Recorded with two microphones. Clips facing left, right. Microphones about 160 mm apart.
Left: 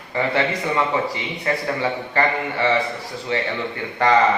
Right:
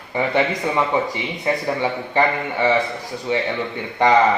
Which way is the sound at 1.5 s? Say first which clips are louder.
Right 2 dB; 15° right (ahead or behind).